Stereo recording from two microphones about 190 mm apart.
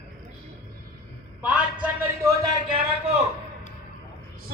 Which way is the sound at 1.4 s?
5° right (ahead or behind).